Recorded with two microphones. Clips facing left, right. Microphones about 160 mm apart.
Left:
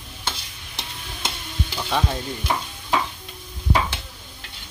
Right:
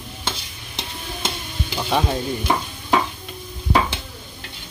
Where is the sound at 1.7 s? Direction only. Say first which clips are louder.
Right 4 dB; 10° right (ahead or behind).